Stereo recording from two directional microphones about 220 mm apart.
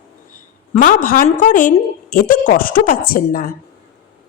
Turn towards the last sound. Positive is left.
turn(degrees=40)  # may be behind; listen again after turning